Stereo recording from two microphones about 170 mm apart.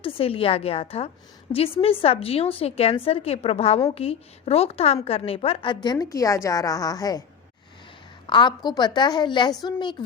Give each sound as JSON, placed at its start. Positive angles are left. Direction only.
{"t": 0.0, "sound": "a woman's voice", "side_deg": 35}
{"t": 8.3, "sound": "a woman's voice", "side_deg": 25}